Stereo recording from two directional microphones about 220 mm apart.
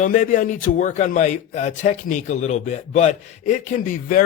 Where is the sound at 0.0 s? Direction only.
35° left (ahead or behind).